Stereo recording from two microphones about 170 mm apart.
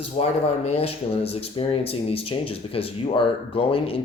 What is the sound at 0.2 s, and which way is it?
Speech, 40° left (ahead or behind).